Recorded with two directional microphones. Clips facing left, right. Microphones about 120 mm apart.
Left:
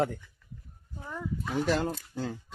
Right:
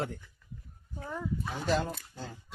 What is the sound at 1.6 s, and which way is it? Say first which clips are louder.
Speech: left 2 dB; 90° left.